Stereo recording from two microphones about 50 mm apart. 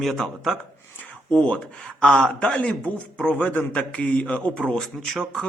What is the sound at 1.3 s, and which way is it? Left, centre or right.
A man's voice, left.